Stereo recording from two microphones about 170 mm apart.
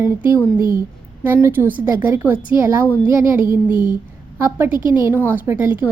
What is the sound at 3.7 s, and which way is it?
Speech, 25° left (ahead or behind).